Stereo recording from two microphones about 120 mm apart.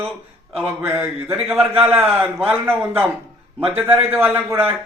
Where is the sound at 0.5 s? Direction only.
15° right (ahead or behind).